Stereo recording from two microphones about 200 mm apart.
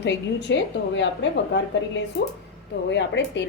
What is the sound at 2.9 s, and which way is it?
Speech, 60° left (ahead or behind).